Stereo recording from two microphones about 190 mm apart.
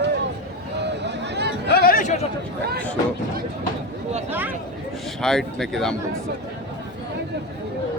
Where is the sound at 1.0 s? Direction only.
60° right (ahead or behind).